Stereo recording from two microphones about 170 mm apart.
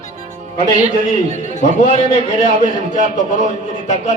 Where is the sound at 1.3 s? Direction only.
45° left (ahead or behind).